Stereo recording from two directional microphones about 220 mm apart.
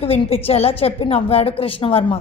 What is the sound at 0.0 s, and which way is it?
A woman's voice, 25° left (ahead or behind).